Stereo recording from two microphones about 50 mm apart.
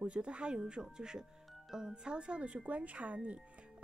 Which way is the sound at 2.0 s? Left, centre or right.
Centre.